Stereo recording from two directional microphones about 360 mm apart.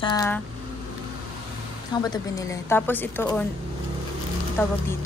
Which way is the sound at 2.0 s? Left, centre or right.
Centre.